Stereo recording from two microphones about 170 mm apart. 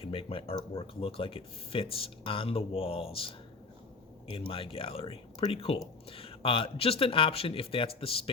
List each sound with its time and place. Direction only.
0.0 s speech: 35° left (ahead or behind)